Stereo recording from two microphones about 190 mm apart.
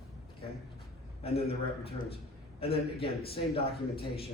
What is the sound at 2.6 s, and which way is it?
Speech, 30° left (ahead or behind).